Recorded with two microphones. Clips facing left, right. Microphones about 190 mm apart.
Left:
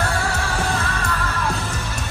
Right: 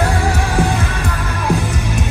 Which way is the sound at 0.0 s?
15° right (ahead or behind).